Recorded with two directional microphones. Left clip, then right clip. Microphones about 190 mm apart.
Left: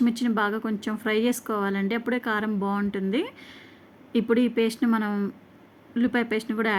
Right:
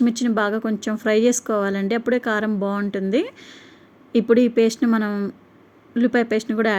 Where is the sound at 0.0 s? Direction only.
15° right (ahead or behind).